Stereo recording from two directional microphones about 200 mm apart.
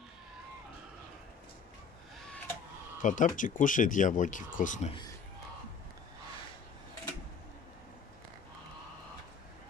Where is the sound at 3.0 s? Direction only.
40° left (ahead or behind).